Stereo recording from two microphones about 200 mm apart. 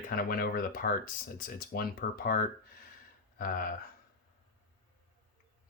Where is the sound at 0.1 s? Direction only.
45° left (ahead or behind).